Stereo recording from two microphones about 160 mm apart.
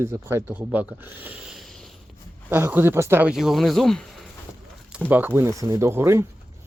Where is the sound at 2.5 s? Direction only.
15° right (ahead or behind).